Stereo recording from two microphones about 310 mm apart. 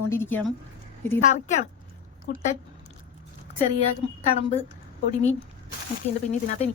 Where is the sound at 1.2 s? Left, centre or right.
Left.